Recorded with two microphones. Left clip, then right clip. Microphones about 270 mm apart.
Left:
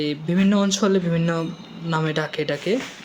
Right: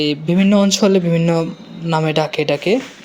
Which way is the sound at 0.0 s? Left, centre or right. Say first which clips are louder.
Right 6 dB; centre.